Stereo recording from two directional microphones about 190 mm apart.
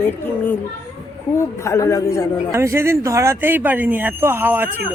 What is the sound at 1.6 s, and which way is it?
Speech, 15° left (ahead or behind).